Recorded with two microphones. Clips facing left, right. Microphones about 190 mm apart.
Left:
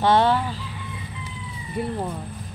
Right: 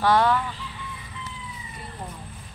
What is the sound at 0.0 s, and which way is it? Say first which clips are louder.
Speech: left 2 dB; 25° left (ahead or behind).